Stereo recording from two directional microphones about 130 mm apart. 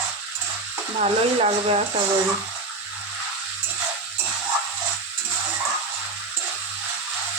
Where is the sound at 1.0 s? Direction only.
50° right (ahead or behind).